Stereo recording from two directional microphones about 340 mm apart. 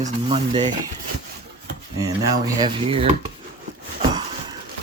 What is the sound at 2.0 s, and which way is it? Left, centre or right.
Speech, centre.